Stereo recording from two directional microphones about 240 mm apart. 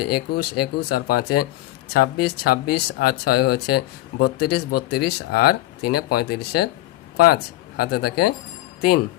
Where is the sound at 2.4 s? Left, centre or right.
Left.